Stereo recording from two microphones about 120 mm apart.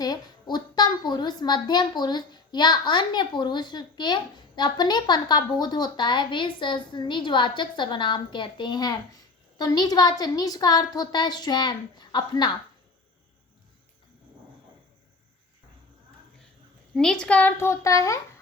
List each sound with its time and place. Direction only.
0.0 s a woman's voice: 35° left (ahead or behind)
16.9 s a child's voice: 5° left (ahead or behind); by 18.2 s 25° left (ahead or behind)